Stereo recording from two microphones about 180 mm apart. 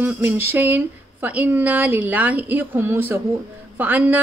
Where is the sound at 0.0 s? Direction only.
10° right (ahead or behind).